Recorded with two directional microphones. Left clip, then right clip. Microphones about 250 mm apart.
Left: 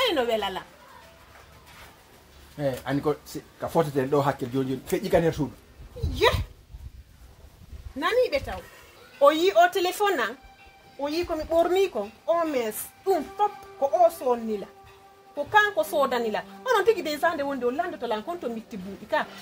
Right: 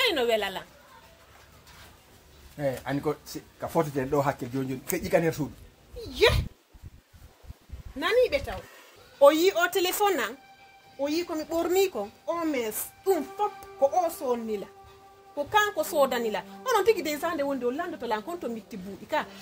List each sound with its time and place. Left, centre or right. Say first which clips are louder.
0.0 s speech: left 1 dB; right
2.5 s speech: left 2 dB; centre
6.1 s dog: even; right
8.0 s a woman's voice: even; right
15.3 s a woman's voice: left 3 dB; right